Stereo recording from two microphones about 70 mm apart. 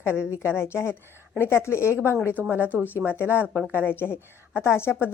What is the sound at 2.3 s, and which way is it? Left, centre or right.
Speech, right.